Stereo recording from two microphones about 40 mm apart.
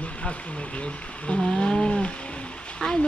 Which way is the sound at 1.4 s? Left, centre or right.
Centre.